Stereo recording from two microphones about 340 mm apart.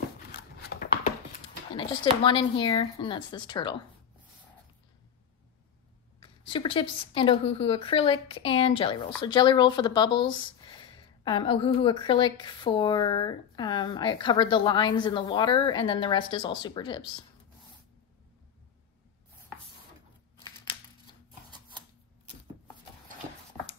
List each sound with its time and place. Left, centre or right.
0.3 s scissors: left
1.8 s a woman's voice: centre
6.2 s a woman's voice: centre